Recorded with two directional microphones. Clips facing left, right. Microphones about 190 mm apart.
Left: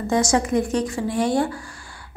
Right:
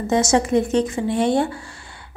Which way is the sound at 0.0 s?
25° right (ahead or behind).